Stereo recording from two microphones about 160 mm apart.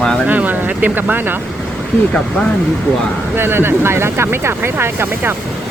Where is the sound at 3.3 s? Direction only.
15° right (ahead or behind).